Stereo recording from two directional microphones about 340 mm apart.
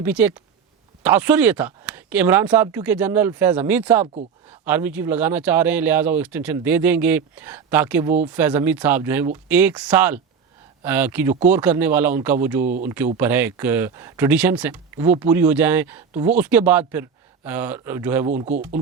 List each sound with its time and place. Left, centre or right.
0.0 s speech: centre
4.0 s speech: centre
4.4 s speech: centre